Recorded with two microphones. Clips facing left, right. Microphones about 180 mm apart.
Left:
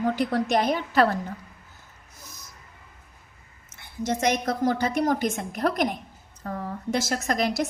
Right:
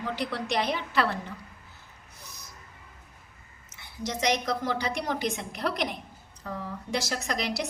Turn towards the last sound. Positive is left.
turn(degrees=50)  # may be behind; listen again after turning